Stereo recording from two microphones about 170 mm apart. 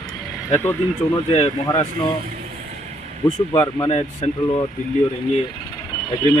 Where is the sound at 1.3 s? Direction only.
35° left (ahead or behind).